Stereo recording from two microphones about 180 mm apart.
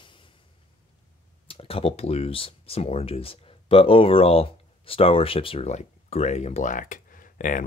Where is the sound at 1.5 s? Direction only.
30° left (ahead or behind).